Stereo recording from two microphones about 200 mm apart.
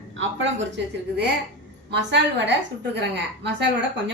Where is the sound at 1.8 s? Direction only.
60° right (ahead or behind).